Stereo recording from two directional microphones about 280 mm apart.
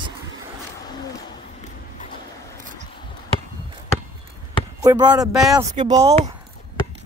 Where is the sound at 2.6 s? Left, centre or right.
Right.